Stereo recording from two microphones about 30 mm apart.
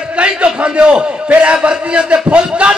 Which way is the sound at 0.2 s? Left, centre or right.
Right.